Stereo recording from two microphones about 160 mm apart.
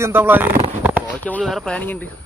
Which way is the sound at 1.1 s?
10° left (ahead or behind).